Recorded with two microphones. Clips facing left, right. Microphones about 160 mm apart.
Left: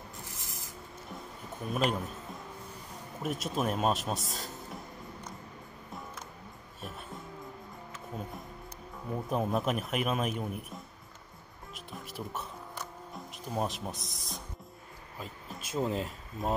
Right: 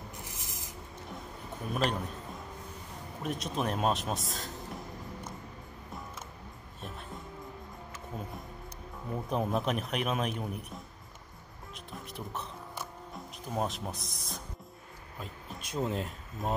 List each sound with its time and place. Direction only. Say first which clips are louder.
0.2 s a sound: right 1 dB; 20° right (ahead or behind)
1.7 s a man's voice: left 1 dB; 5° left (ahead or behind)
3.2 s a man's voice: left 1 dB; 5° left (ahead or behind)
8.1 s music: left 1 dB; centre (ahead or behind)
9.1 s a man's voice: left 1 dB; centre (ahead or behind)
11.7 s music: left 1 dB; centre (ahead or behind)
15.1 s speech: even; centre (ahead or behind)